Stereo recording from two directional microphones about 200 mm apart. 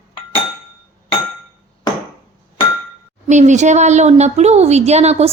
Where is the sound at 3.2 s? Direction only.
35° right (ahead or behind).